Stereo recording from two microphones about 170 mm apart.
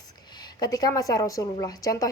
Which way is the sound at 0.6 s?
20° left (ahead or behind).